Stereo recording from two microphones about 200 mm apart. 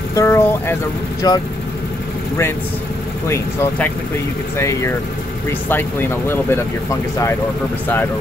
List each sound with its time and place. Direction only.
0.1 s speech: 15° left (ahead or behind)
3.3 s speech: 10° left (ahead or behind)